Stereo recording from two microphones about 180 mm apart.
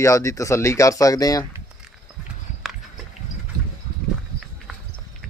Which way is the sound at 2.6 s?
Centre (ahead or behind).